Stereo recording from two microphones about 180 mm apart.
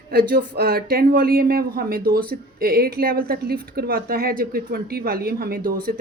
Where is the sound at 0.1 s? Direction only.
60° right (ahead or behind).